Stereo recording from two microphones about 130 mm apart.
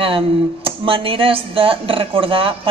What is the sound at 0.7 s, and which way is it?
A man's voice, 45° right (ahead or behind).